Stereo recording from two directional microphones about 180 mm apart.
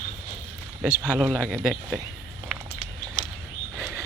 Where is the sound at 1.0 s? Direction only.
5° right (ahead or behind).